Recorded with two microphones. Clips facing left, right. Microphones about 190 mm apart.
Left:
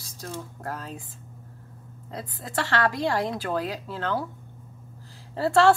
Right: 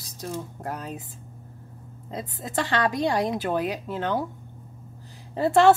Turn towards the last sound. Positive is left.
turn(degrees=-20)  # may be behind; listen again after turning